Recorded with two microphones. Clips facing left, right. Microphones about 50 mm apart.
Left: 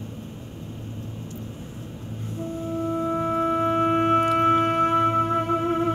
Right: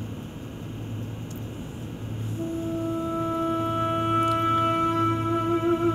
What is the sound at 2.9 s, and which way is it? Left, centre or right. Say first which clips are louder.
Music: left 6 dB; left.